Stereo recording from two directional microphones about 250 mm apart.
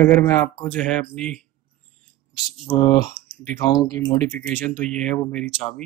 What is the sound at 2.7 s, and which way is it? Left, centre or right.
Speech, centre.